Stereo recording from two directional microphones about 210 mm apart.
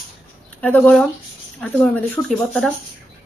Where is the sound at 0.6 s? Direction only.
5° left (ahead or behind).